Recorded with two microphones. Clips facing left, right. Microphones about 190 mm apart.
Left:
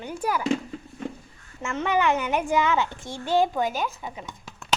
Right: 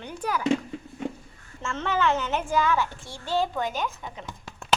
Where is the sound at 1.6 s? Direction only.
15° left (ahead or behind).